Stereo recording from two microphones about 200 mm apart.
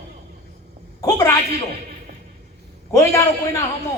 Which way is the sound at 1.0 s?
15° left (ahead or behind).